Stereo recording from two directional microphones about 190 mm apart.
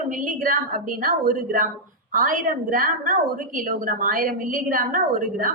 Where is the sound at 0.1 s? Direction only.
45° right (ahead or behind).